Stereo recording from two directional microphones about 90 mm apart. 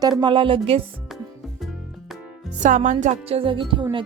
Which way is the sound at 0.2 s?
65° right (ahead or behind).